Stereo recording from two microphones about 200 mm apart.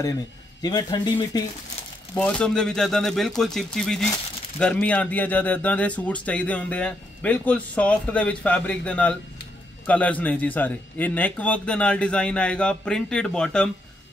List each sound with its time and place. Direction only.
0.6 s a man's voice: 20° left (ahead or behind)
2.1 s a man's voice: 5° left (ahead or behind)